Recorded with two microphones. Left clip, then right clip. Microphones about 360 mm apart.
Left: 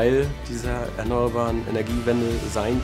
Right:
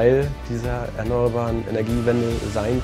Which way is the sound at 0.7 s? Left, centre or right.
Right.